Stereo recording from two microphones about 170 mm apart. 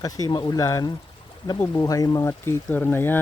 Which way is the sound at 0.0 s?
25° left (ahead or behind).